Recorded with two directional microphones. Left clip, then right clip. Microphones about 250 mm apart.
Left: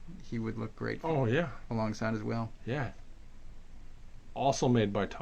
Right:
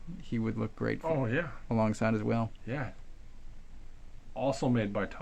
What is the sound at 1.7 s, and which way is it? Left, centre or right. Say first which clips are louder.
Speech: right 4 dB; right.